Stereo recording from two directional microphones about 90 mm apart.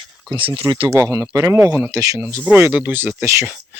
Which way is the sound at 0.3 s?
75° right (ahead or behind).